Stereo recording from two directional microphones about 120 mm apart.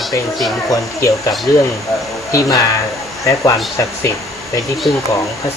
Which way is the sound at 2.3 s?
25° left (ahead or behind).